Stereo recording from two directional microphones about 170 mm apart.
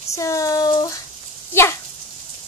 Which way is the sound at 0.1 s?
20° left (ahead or behind).